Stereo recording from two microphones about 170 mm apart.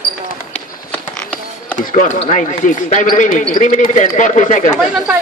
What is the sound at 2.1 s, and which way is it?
Speech, 45° left (ahead or behind).